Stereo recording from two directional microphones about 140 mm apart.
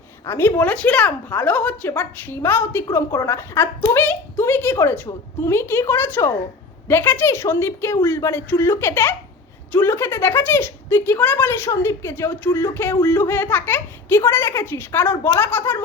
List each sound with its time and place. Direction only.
0.3 s a woman's voice: 15° left (ahead or behind)